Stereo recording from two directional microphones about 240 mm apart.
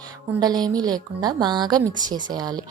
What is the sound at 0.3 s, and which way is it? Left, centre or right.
A woman's voice, centre.